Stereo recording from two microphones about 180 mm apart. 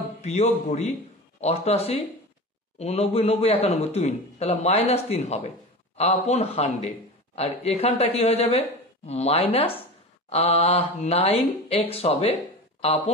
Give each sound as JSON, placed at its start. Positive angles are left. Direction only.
{"t": 0.2, "sound": "a woman's voice", "side_deg": 40}